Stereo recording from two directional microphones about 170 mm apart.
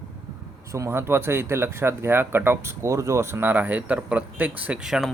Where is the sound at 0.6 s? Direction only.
15° right (ahead or behind).